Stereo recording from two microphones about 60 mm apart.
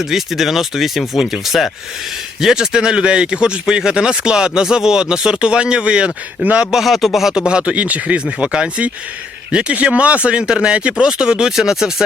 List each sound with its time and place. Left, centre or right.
0.0 s speech: centre
6.7 s speech: centre
7.3 s speech: centre